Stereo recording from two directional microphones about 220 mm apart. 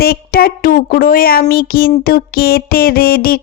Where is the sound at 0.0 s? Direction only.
45° left (ahead or behind).